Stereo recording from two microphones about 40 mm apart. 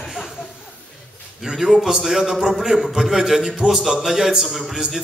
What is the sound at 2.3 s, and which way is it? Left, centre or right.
Speech, right.